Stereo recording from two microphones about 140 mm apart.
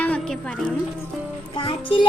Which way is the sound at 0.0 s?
10° left (ahead or behind).